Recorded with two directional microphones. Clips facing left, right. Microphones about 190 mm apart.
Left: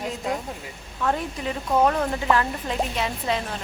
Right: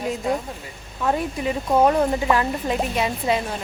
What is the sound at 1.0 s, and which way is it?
A woman's voice, 15° right (ahead or behind).